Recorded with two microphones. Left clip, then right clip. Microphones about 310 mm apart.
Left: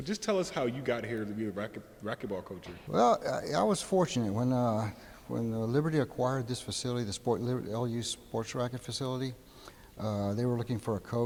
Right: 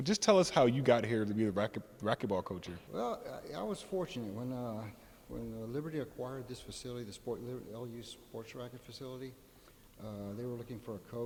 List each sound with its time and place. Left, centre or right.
0.0 s speech: right
2.9 s speech: left